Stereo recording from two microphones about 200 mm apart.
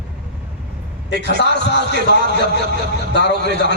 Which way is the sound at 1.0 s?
60° left (ahead or behind).